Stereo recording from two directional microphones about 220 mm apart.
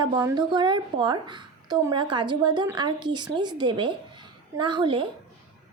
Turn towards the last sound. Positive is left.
turn(degrees=-20)  # may be behind; listen again after turning